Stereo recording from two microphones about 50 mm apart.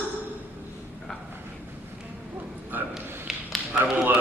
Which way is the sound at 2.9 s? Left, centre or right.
Centre.